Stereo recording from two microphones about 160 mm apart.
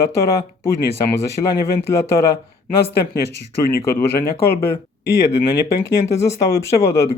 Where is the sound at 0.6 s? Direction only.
20° left (ahead or behind).